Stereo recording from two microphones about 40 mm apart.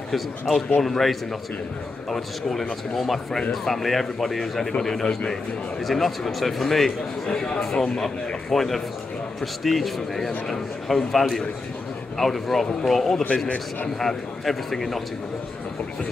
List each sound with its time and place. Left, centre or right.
0.1 s a man's voice: centre
5.8 s speech: centre
7.9 s a man's voice: centre
8.5 s a man's voice: centre